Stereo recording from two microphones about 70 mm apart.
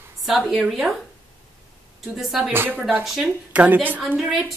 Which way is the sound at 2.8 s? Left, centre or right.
Centre.